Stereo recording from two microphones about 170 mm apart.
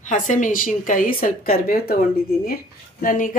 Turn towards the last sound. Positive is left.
turn(degrees=50)  # may be behind; listen again after turning